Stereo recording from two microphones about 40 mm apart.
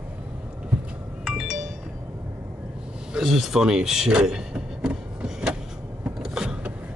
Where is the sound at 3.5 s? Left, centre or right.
Centre.